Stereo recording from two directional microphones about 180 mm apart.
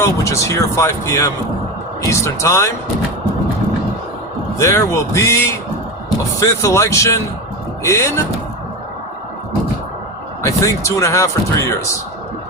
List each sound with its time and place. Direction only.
0.0 s speech: 15° left (ahead or behind)
4.5 s speech: 15° left (ahead or behind)
10.4 s speech: 15° left (ahead or behind)